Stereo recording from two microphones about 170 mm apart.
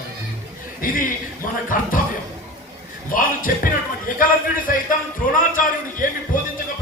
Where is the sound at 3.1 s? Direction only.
55° left (ahead or behind).